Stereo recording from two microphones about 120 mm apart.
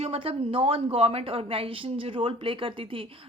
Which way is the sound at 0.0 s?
55° right (ahead or behind).